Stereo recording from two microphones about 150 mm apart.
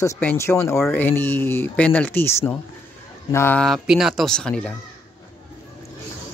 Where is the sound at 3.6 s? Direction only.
Centre (ahead or behind).